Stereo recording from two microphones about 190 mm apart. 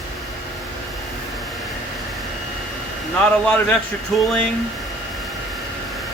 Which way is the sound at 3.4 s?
10° left (ahead or behind).